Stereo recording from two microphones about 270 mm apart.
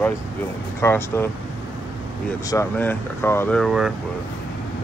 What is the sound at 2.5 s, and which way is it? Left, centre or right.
Speech, centre.